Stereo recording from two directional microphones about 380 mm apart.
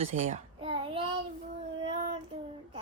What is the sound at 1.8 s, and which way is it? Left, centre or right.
Child singing, centre.